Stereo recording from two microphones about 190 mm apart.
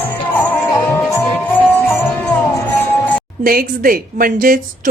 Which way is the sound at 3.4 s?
50° right (ahead or behind).